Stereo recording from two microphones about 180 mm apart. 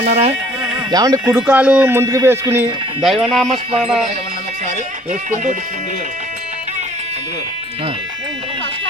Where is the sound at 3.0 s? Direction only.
Centre (ahead or behind).